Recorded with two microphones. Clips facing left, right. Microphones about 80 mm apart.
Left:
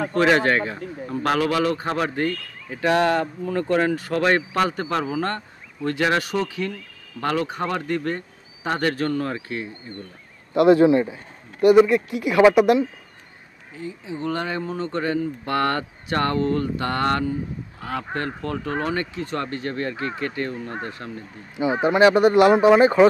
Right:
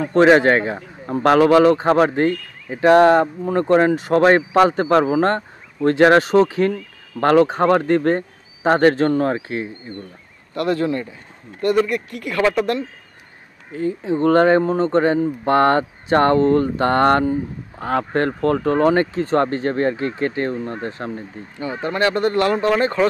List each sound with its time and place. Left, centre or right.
0.1 s speech: right
5.0 s speech: right
10.5 s speech: centre
13.7 s speech: right
21.5 s speech: centre